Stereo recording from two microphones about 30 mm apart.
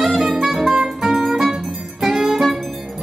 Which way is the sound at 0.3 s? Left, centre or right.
Centre.